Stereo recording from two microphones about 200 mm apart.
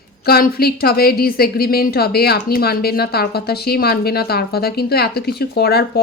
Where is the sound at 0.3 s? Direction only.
50° left (ahead or behind).